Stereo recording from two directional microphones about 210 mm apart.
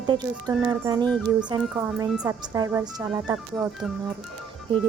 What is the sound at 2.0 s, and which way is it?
Speech, 5° right (ahead or behind).